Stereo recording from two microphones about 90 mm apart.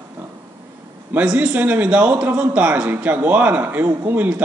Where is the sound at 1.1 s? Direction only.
10° right (ahead or behind).